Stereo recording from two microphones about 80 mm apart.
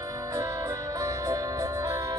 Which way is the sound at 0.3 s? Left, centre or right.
Right.